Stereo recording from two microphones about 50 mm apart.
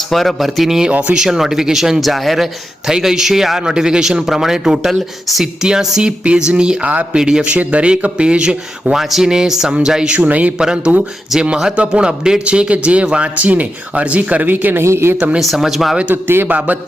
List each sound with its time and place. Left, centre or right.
0.1 s a man's voice: centre
7.4 s a man's voice: right
9.0 s a man's voice: centre
10.1 s a man's voice: right
10.6 s a man's voice: centre; by 14.8 s right
14.8 s speech: right
15.4 s speech: centre
16.2 s speech: right
16.5 s a man's voice: right